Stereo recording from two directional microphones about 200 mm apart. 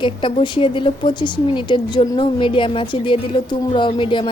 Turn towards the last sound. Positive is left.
turn(degrees=25)  # may be behind; listen again after turning